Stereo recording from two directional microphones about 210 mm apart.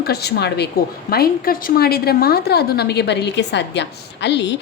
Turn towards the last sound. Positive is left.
turn(degrees=55)  # may be behind; listen again after turning